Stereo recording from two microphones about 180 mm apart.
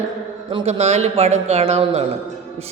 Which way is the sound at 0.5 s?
35° right (ahead or behind).